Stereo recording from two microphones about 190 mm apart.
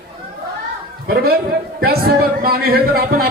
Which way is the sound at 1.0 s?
55° right (ahead or behind).